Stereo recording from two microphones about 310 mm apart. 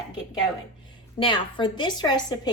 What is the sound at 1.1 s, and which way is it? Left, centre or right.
A woman's voice, centre.